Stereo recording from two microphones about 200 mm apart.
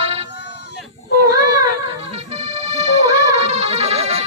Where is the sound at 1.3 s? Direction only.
15° right (ahead or behind).